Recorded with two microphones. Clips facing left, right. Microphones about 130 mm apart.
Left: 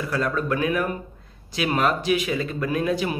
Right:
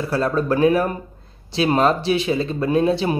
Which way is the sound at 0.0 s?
30° right (ahead or behind).